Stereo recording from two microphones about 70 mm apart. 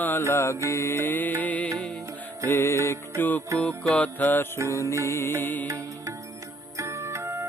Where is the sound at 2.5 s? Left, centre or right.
Left.